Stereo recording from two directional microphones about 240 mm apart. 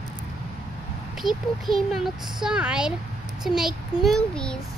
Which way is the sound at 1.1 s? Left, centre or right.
Centre.